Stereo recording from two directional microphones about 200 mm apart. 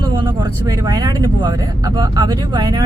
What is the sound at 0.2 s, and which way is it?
Speech, 15° right (ahead or behind).